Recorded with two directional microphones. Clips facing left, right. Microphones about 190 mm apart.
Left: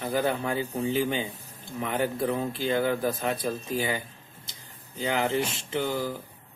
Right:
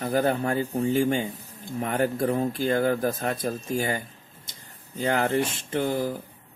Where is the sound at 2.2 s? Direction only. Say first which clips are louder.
Right 3 dB; 45° right (ahead or behind).